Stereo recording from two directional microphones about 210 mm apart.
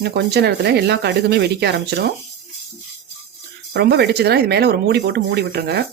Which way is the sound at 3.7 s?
50° right (ahead or behind).